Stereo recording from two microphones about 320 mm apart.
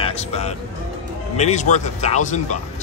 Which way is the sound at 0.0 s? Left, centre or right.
Centre.